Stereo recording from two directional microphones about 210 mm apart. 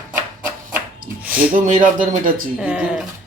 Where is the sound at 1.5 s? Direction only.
40° right (ahead or behind).